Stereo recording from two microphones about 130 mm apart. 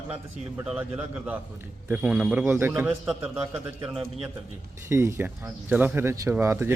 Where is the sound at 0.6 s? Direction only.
5° right (ahead or behind).